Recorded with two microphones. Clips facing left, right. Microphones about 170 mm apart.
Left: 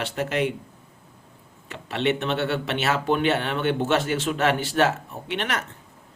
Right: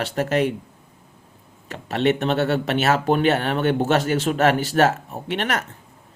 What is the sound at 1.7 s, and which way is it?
A man's voice, 40° right (ahead or behind).